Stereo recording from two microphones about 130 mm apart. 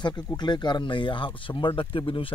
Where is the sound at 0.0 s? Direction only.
35° left (ahead or behind).